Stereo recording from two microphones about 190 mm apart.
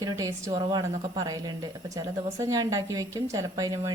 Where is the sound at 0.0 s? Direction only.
15° right (ahead or behind).